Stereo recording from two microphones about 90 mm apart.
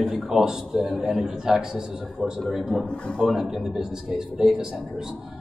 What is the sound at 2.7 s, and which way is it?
Speech, 5° left (ahead or behind).